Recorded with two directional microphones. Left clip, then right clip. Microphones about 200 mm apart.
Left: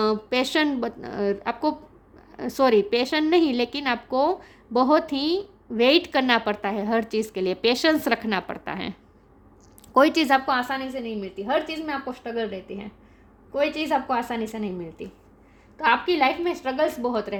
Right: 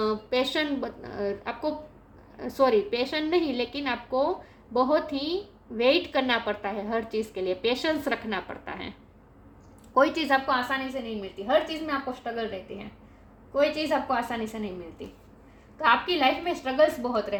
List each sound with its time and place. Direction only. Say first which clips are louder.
0.0 s a woman's voice: left 3 dB; 60° left (ahead or behind)
9.9 s a woman's voice: left 4 dB; 60° left (ahead or behind)
13.5 s a woman's voice: left 1 dB; 55° left (ahead or behind)